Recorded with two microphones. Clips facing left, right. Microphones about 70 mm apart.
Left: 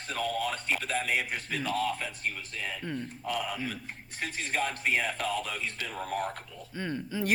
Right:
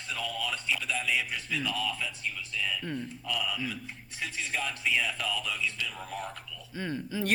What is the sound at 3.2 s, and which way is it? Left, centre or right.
A man's voice, left.